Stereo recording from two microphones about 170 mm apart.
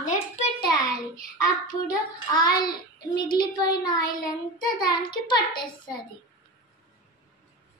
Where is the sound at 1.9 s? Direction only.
25° left (ahead or behind).